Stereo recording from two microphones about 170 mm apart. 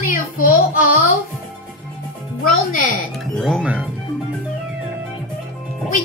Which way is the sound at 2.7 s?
50° left (ahead or behind).